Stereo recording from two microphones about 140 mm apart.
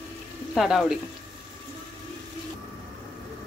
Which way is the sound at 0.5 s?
Centre (ahead or behind).